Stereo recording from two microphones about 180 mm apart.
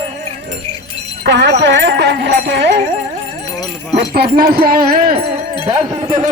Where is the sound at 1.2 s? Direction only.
70° right (ahead or behind).